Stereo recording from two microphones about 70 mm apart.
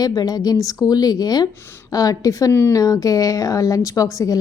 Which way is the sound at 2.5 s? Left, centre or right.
Left.